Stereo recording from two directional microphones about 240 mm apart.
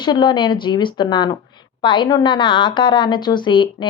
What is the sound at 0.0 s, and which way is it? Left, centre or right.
Speech, centre.